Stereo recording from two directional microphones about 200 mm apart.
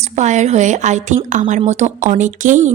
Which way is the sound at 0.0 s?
35° right (ahead or behind).